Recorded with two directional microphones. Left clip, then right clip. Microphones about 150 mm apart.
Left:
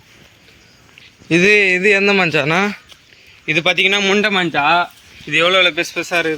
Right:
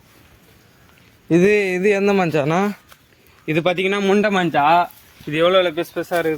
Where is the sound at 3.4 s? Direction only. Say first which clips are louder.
Left 5 dB; 90° right.